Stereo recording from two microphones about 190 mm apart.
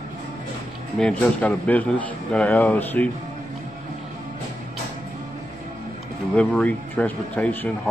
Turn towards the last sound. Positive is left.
turn(degrees=10)  # may be behind; listen again after turning